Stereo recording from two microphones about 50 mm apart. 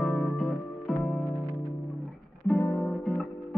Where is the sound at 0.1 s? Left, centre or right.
Centre.